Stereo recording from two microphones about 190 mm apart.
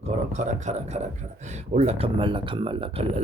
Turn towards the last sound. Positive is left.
turn(degrees=-30)  # may be behind; listen again after turning